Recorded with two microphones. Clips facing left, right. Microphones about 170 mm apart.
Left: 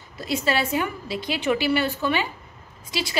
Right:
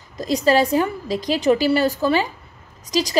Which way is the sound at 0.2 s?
40° right (ahead or behind).